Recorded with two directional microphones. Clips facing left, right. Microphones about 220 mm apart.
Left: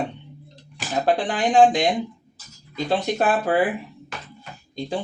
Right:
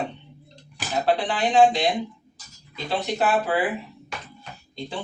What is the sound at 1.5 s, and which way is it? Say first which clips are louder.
Speech: left 2 dB; 45° left (ahead or behind).